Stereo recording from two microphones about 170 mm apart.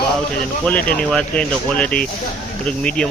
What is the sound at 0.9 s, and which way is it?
Speech, 5° left (ahead or behind).